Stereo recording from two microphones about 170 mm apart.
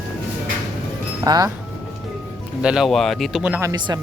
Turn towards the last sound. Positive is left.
turn(degrees=-25)  # may be behind; listen again after turning